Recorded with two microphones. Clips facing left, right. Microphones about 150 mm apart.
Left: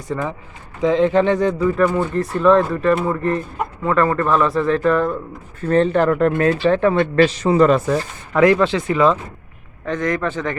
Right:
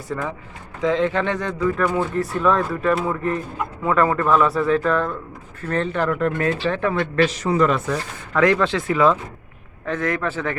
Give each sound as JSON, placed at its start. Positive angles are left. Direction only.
{"t": 0.1, "sound": "speech", "side_deg": 5}
{"t": 0.8, "sound": "speech", "side_deg": 20}
{"t": 1.5, "sound": "speech", "side_deg": 5}
{"t": 1.9, "sound": "speech", "side_deg": -5}
{"t": 5.6, "sound": "speech", "side_deg": 30}
{"t": 8.4, "sound": "speech", "side_deg": 10}
{"t": 8.6, "sound": "speech", "side_deg": 0}